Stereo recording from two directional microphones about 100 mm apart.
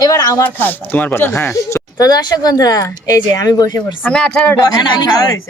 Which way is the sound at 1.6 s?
35° left (ahead or behind).